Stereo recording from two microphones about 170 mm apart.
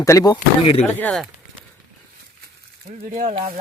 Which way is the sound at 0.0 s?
20° left (ahead or behind).